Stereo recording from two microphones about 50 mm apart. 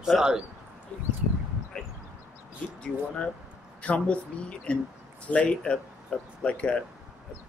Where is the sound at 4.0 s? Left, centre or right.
Left.